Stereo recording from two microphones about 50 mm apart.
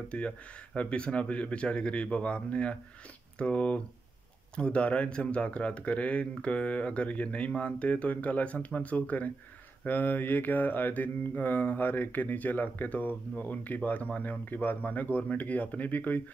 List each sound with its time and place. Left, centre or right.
0.7 s speech: left
9.8 s mantra: left